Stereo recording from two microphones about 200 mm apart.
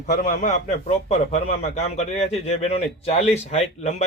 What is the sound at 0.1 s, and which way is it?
Speech, 40° left (ahead or behind).